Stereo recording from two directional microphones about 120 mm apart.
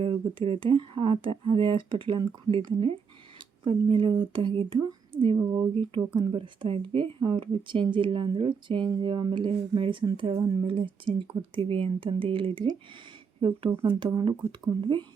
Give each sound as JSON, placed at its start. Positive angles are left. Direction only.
{"t": 0.0, "sound": "speech", "side_deg": -45}
{"t": 5.4, "sound": "speech", "side_deg": -20}
{"t": 6.1, "sound": "speech", "side_deg": -45}
{"t": 13.8, "sound": "speech", "side_deg": -40}